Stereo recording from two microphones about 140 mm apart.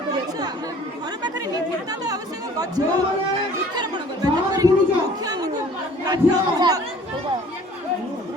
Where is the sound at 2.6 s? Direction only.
25° right (ahead or behind).